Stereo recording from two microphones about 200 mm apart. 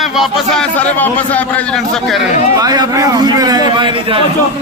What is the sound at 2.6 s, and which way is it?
A man's voice, 20° right (ahead or behind).